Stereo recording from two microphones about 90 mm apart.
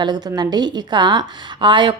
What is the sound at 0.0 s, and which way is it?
A woman's voice, 50° right (ahead or behind).